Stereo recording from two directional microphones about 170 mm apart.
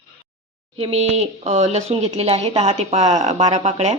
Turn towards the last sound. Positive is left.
turn(degrees=-40)  # may be behind; listen again after turning